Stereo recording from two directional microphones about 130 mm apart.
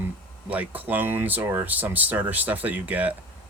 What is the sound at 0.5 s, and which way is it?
Speech, 10° right (ahead or behind).